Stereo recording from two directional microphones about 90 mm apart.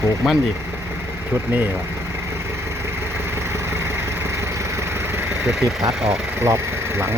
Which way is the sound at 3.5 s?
30° right (ahead or behind).